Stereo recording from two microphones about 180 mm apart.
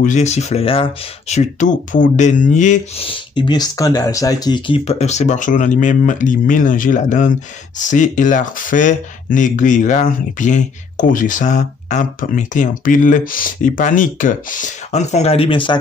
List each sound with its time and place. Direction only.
0.0 s speech: 40° left (ahead or behind)
1.3 s speech: 45° left (ahead or behind)
3.1 s speech: 25° left (ahead or behind)